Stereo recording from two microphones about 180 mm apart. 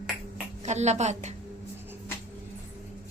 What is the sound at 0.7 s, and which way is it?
Speech, 40° right (ahead or behind).